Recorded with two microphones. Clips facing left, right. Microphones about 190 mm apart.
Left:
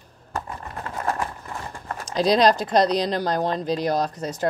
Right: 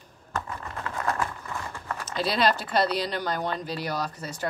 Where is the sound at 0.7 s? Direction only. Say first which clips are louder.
Left 2 dB; 30° left (ahead or behind).